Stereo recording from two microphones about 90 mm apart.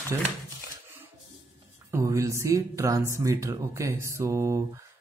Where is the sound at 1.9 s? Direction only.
35° right (ahead or behind).